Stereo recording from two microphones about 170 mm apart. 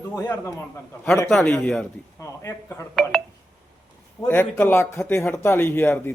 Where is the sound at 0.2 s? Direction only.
15° left (ahead or behind).